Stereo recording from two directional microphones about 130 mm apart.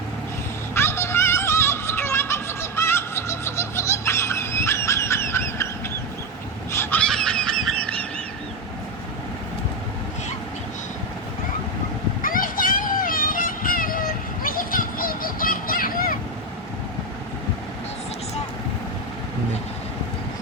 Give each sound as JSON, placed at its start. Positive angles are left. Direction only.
{"t": 0.7, "sound": "music", "side_deg": 20}
{"t": 6.7, "sound": "fowl", "side_deg": 20}
{"t": 7.0, "sound": "a sound", "side_deg": 5}
{"t": 12.2, "sound": "music", "side_deg": 90}